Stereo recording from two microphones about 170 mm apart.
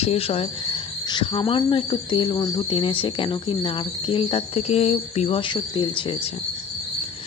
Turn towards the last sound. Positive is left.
turn(degrees=30)  # may be behind; listen again after turning